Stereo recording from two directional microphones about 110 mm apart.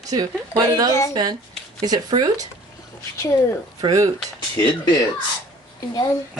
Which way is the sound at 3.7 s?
35° right (ahead or behind).